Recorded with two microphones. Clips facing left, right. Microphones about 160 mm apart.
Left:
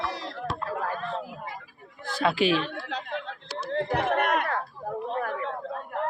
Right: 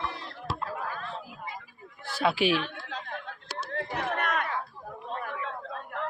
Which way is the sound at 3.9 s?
60° left (ahead or behind).